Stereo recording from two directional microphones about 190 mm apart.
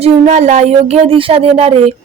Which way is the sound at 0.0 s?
35° right (ahead or behind).